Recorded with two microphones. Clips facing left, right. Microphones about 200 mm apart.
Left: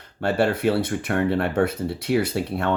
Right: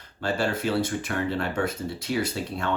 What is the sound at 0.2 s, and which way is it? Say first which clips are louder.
Speech: left 5 dB; 60° left (ahead or behind).